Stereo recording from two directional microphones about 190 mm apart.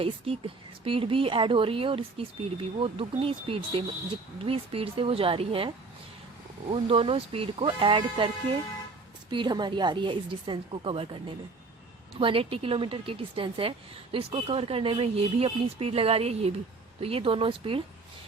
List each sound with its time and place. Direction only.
0.0 s speech: 30° right (ahead or behind)
9.3 s speech: 25° right (ahead or behind)